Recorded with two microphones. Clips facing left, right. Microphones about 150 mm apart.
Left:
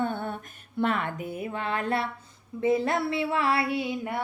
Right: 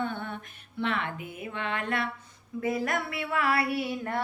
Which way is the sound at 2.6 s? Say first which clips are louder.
Left 5 dB; 25° left (ahead or behind).